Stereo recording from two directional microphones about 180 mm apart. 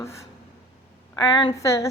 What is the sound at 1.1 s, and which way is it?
Speech, 25° left (ahead or behind).